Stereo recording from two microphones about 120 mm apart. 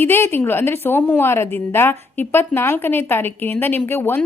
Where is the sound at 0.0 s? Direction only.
20° left (ahead or behind).